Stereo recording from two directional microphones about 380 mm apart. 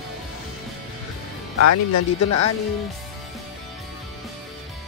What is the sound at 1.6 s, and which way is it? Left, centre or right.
Speech, left.